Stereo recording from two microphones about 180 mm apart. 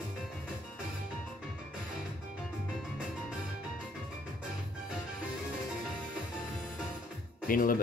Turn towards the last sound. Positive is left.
turn(degrees=50)  # may be behind; listen again after turning